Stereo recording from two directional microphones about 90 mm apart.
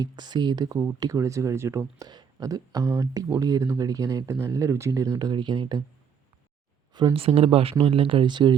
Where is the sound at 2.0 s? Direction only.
45° right (ahead or behind).